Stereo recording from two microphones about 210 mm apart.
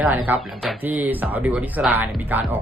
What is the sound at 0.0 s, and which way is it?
Speech, 10° right (ahead or behind).